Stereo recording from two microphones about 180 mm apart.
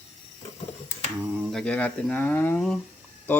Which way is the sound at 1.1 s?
10° right (ahead or behind).